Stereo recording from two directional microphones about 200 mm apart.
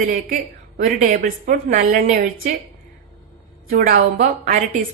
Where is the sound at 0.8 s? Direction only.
40° right (ahead or behind).